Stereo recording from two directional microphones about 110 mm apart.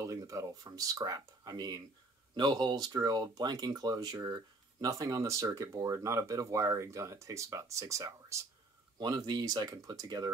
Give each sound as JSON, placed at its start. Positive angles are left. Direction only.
{"t": 0.0, "sound": "speech", "side_deg": -30}
{"t": 8.9, "sound": "speech", "side_deg": -40}